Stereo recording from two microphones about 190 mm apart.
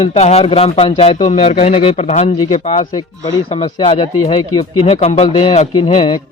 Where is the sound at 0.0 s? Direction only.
35° left (ahead or behind).